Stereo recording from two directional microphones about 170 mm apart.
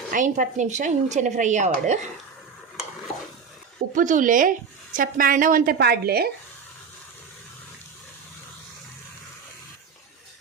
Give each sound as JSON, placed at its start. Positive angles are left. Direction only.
{"t": 0.1, "sound": "a woman's voice", "side_deg": -50}
{"t": 3.9, "sound": "a woman's voice", "side_deg": -50}